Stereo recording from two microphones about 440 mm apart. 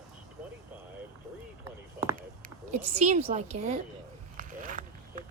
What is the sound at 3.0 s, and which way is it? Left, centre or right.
Speech, centre.